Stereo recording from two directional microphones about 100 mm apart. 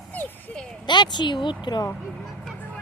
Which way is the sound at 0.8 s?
50° left (ahead or behind).